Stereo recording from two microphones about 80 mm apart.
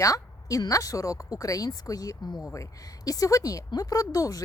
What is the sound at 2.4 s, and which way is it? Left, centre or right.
A woman's voice, left.